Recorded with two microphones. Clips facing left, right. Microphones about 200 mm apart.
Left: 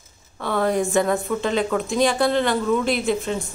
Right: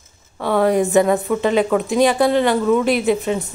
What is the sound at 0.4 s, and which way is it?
Speech, 10° right (ahead or behind).